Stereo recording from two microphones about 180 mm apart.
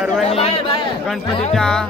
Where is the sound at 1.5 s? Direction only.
5° left (ahead or behind).